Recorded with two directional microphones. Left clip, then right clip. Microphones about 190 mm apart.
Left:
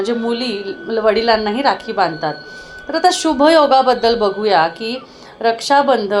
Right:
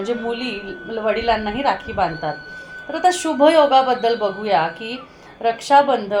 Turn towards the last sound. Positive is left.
turn(degrees=30)  # may be behind; listen again after turning